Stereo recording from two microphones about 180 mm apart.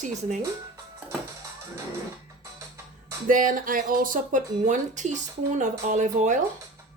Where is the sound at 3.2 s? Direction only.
50° right (ahead or behind).